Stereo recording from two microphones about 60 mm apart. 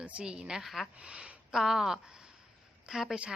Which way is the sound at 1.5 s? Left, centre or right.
Centre.